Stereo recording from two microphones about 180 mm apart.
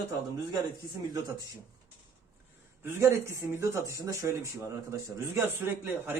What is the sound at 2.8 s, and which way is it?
Speech, 15° right (ahead or behind).